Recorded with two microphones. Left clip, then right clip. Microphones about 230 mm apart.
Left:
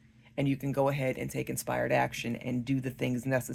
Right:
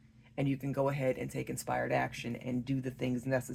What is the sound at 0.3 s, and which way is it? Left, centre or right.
Speech, left.